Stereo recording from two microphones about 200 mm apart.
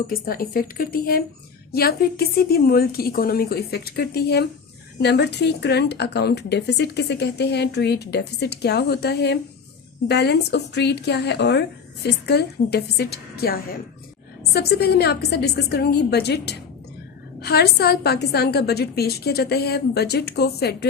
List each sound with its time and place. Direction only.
0.1 s a woman's voice: 45° left (ahead or behind)